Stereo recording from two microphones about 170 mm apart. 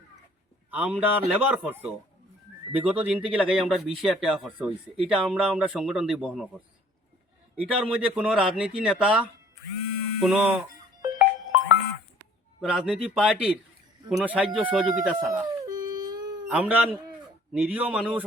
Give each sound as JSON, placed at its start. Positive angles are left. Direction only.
{"t": 0.7, "sound": "speech", "side_deg": -10}
{"t": 7.5, "sound": "speech", "side_deg": -5}
{"t": 11.0, "sound": "music", "side_deg": -20}
{"t": 12.6, "sound": "speech", "side_deg": -5}
{"t": 15.3, "sound": "dog", "side_deg": -20}
{"t": 16.5, "sound": "speech", "side_deg": -10}